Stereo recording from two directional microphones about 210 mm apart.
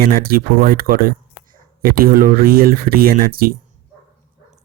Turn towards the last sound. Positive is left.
turn(degrees=-45)  # may be behind; listen again after turning